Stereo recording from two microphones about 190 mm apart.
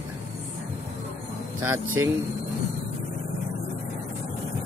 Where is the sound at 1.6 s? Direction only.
15° right (ahead or behind).